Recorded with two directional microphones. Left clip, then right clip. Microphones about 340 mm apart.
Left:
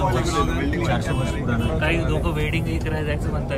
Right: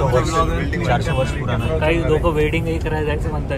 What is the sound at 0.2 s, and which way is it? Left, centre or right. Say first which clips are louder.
Speech: right 3 dB; centre.